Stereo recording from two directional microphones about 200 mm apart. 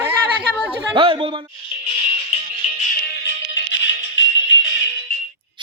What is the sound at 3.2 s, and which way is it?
Music, 65° left (ahead or behind).